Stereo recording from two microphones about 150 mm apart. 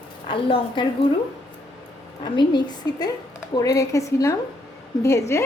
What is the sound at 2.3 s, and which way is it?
A woman's voice, 30° left (ahead or behind).